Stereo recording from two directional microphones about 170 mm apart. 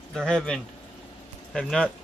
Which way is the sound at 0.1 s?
5° left (ahead or behind).